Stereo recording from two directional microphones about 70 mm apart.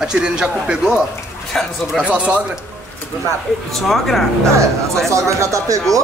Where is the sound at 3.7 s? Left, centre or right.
Centre.